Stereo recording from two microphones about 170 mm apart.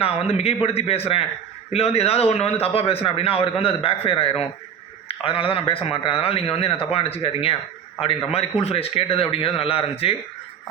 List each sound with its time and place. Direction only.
0.0 s a man's voice: 35° left (ahead or behind)